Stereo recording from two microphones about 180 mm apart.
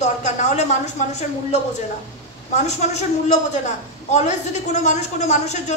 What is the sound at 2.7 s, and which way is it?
A man's voice, 40° left (ahead or behind).